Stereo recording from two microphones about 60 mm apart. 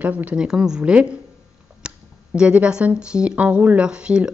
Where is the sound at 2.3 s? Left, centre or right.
Centre.